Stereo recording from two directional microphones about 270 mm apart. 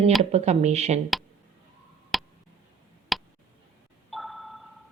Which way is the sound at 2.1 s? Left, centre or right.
Centre.